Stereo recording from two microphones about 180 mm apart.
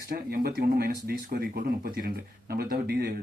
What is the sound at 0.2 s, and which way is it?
Speech, 60° right (ahead or behind).